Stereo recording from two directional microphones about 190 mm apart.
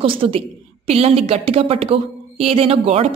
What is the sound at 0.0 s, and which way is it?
A woman's voice, 30° right (ahead or behind).